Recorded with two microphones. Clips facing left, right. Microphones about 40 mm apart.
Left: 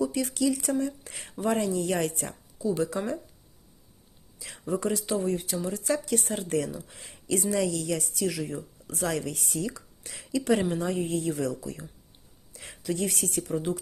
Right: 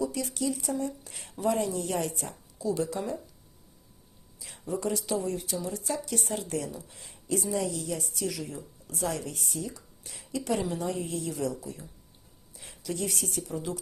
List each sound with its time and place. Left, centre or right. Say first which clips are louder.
0.0 s speech: left 4 dB; left
0.8 s a woman's voice: left 3 dB; left
2.7 s a woman's voice: left 3 dB; left
4.5 s a woman's voice: left 2 dB; left
7.6 s a woman's voice: left 4 dB; left